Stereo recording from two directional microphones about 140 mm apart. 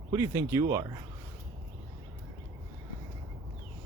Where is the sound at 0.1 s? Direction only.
25° right (ahead or behind).